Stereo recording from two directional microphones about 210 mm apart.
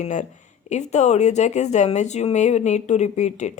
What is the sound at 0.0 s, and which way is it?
Speech, 35° left (ahead or behind).